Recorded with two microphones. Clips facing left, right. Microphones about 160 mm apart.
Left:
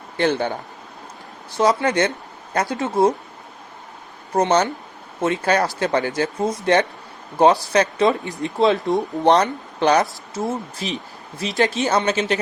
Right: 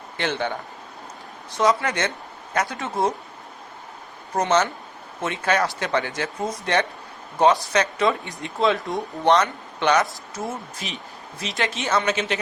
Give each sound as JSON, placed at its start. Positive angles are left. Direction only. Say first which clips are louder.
{"t": 0.2, "sound": "speech", "louder": "left 6 dB", "side_deg": 40}
{"t": 1.5, "sound": "speech", "louder": "left 3 dB", "side_deg": 35}
{"t": 2.7, "sound": "speech", "louder": "left 10 dB", "side_deg": 20}
{"t": 4.4, "sound": "speech", "louder": "left 3 dB", "side_deg": 35}
{"t": 7.3, "sound": "speech", "louder": "left 3 dB", "side_deg": 30}